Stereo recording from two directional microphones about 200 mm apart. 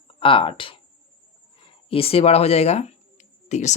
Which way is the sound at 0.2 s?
25° left (ahead or behind).